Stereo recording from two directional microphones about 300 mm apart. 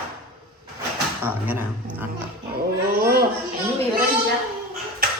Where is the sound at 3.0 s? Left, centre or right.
Right.